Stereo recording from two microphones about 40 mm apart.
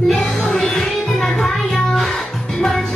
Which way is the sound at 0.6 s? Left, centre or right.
Centre.